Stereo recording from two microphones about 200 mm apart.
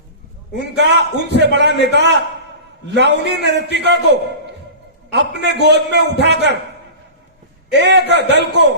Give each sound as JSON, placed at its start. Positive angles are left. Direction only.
{"t": 0.6, "sound": "a man's voice", "side_deg": -60}
{"t": 5.1, "sound": "a man's voice", "side_deg": -60}
{"t": 7.7, "sound": "a man's voice", "side_deg": -60}